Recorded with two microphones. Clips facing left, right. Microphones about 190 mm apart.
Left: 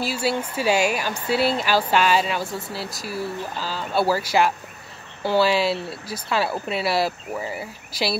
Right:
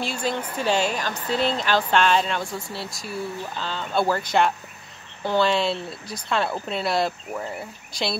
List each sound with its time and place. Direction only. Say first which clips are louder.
0.0 s speech: left 3 dB; 5° left (ahead or behind)